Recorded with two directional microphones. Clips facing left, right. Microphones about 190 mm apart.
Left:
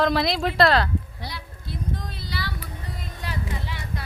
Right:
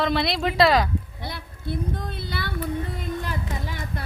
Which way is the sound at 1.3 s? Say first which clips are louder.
Right 8 dB; 55° right (ahead or behind).